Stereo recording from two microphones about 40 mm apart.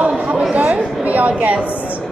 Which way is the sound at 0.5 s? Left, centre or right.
Right.